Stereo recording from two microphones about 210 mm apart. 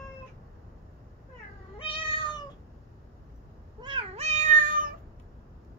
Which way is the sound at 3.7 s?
25° right (ahead or behind).